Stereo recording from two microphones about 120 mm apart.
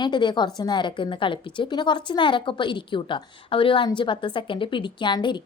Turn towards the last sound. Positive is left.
turn(degrees=40)  # may be behind; listen again after turning